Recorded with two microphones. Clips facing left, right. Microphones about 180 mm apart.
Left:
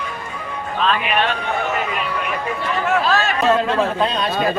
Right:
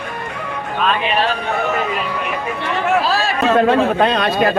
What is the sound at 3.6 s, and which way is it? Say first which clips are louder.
Speech: right 5 dB; 60° right (ahead or behind).